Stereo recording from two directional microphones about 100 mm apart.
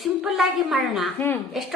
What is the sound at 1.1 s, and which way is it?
Speech, 20° left (ahead or behind).